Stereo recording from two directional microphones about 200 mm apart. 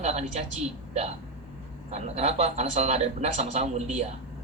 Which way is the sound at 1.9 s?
35° right (ahead or behind).